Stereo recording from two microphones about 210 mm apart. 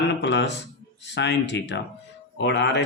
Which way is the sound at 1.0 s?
55° left (ahead or behind).